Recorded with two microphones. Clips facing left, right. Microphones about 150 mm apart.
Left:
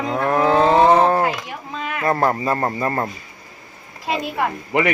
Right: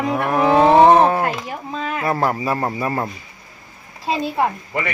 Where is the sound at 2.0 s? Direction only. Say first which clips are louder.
Left 2 dB; 5° right (ahead or behind).